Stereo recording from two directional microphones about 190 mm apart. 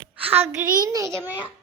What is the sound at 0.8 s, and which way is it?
Speech, 20° right (ahead or behind).